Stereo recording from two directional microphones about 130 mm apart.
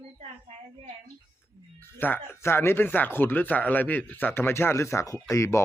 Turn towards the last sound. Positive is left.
turn(degrees=25)  # may be behind; listen again after turning